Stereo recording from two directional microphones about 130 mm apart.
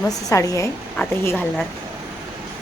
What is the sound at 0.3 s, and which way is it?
A woman's voice, 25° left (ahead or behind).